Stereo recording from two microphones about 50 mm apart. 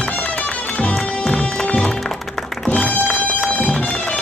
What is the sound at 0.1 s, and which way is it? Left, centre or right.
Music, left.